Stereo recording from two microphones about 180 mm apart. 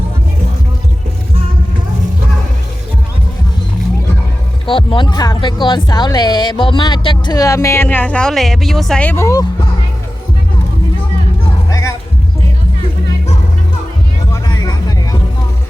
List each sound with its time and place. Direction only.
4.6 s speech: 30° left (ahead or behind)
11.7 s music: 15° left (ahead or behind)
14.4 s music: 20° left (ahead or behind)